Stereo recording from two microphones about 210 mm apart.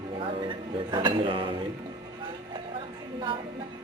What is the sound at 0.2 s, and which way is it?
Dishes, 25° right (ahead or behind).